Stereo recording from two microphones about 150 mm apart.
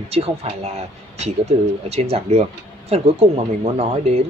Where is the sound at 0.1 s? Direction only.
40° right (ahead or behind).